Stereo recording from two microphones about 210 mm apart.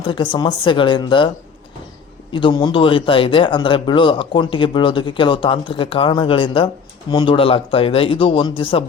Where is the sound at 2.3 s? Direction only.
25° left (ahead or behind).